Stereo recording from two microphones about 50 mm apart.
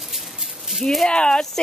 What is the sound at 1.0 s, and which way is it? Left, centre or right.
Speech, centre.